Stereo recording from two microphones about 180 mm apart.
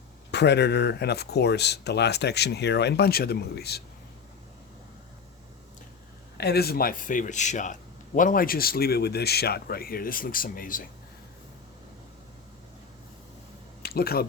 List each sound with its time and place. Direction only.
0.3 s speech: 70° left (ahead or behind)
6.3 s speech: 65° left (ahead or behind)
13.8 s speech: 60° left (ahead or behind)